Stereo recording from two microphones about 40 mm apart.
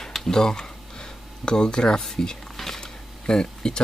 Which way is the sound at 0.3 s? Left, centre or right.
Centre.